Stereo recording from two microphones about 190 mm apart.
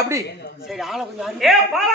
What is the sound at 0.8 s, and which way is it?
Speech, centre (ahead or behind).